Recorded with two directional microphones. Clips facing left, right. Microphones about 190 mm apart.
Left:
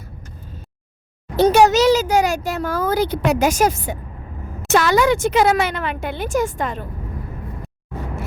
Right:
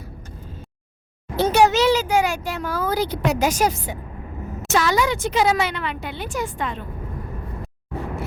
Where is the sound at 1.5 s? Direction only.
40° left (ahead or behind).